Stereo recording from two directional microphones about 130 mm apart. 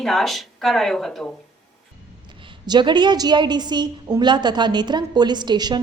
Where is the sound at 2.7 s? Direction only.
35° right (ahead or behind).